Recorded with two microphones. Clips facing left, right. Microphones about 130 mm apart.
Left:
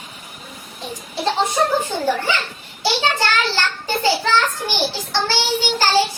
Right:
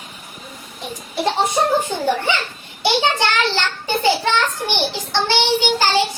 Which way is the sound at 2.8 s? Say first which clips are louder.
Right 2 dB; 20° right (ahead or behind).